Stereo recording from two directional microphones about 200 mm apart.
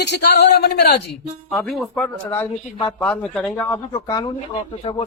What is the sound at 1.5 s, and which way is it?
Speech, centre (ahead or behind).